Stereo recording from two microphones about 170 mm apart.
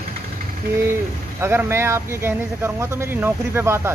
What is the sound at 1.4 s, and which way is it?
Speech, 15° right (ahead or behind).